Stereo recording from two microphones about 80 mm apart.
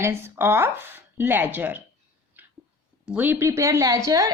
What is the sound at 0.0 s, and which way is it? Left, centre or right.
Speech, right.